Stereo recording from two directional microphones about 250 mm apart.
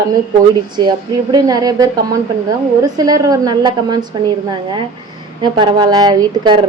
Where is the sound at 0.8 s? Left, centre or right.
Centre.